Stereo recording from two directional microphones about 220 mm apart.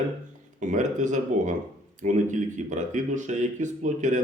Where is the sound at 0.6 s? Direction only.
35° right (ahead or behind).